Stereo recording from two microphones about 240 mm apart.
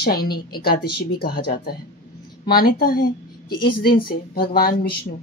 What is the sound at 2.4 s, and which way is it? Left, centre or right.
A woman's voice, left.